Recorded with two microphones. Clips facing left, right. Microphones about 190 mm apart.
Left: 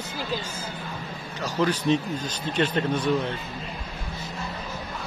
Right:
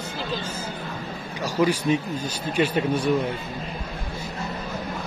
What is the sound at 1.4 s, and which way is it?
Speech, 10° right (ahead or behind).